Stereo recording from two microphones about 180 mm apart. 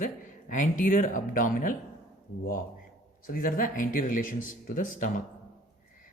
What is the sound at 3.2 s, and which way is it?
Speech, 50° left (ahead or behind).